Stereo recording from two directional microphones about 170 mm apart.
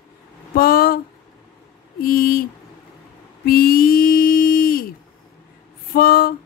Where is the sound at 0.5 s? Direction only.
60° left (ahead or behind).